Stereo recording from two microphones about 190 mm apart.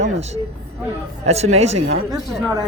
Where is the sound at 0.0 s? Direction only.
35° right (ahead or behind).